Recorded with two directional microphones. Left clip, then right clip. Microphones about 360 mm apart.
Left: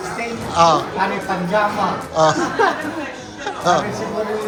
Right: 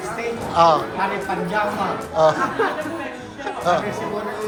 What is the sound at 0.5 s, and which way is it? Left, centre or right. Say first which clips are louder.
Speech: left 1 dB; centre.